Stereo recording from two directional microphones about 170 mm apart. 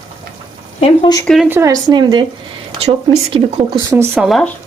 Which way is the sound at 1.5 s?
20° right (ahead or behind).